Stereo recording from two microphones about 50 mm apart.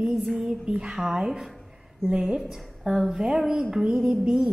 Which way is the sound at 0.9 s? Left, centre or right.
Centre.